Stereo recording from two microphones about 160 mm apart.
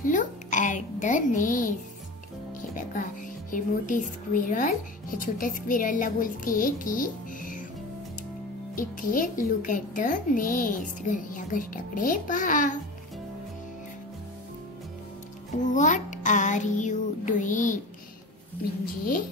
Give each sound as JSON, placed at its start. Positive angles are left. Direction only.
{"t": 0.0, "sound": "a sound", "side_deg": 55}
{"t": 2.7, "sound": "speech", "side_deg": 55}
{"t": 8.7, "sound": "speech", "side_deg": 60}
{"t": 15.6, "sound": "music", "side_deg": 50}
{"t": 18.6, "sound": "speech", "side_deg": 65}